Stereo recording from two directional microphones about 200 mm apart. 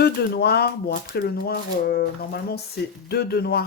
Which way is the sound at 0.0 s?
55° left (ahead or behind).